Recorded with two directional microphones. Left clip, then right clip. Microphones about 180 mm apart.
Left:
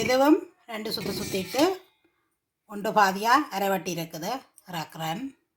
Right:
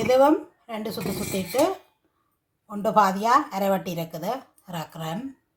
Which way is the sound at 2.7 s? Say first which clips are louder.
Right 2 dB; 10° left (ahead or behind).